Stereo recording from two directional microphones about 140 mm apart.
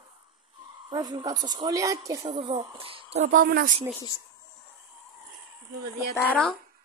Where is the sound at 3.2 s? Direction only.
75° right (ahead or behind).